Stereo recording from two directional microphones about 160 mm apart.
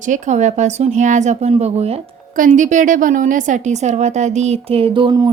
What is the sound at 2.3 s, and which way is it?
A woman's voice, 55° right (ahead or behind).